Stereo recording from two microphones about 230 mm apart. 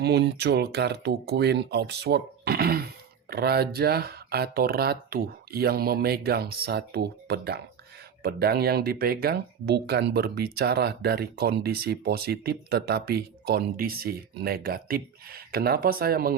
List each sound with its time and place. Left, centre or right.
0.0 s speech: right